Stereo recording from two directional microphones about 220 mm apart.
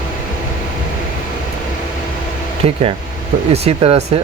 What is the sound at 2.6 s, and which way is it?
Speech, 25° right (ahead or behind).